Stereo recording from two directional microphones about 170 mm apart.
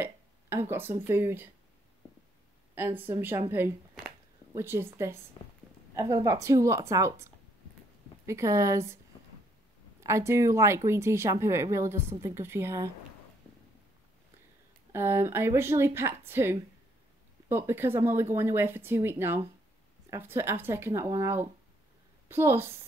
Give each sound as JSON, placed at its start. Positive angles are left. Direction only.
{"t": 0.0, "sound": "a sound", "side_deg": -15}
{"t": 1.0, "sound": "speech", "side_deg": -15}
{"t": 2.7, "sound": "speech", "side_deg": -10}
{"t": 14.9, "sound": "speech", "side_deg": -15}